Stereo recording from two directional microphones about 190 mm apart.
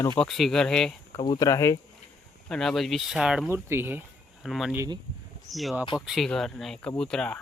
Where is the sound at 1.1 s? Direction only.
20° left (ahead or behind).